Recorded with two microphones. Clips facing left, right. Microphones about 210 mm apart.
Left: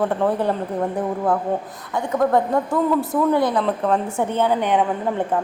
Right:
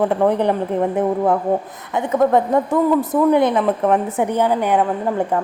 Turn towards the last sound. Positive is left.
turn(degrees=-5)  # may be behind; listen again after turning